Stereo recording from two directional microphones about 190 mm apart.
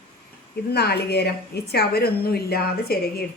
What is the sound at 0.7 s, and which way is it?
A woman's voice, 60° left (ahead or behind).